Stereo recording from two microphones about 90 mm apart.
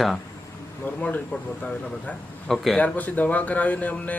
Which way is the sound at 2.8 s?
15° left (ahead or behind).